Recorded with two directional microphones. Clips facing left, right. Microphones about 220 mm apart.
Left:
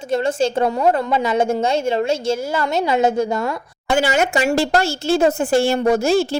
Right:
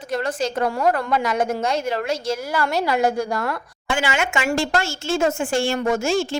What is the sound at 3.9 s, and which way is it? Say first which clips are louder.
A woman's voice: left 6 dB; 40° left (ahead or behind).